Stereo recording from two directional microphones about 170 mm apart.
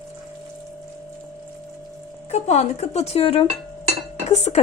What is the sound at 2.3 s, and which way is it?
Speech, 40° left (ahead or behind).